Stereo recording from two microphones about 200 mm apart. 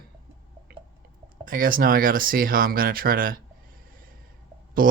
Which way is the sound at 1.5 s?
45° right (ahead or behind).